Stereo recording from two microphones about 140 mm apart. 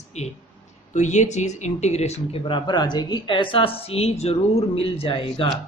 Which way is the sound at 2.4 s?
35° left (ahead or behind).